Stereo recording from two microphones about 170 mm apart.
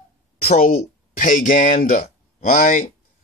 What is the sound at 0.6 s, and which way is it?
Speech, 55° left (ahead or behind).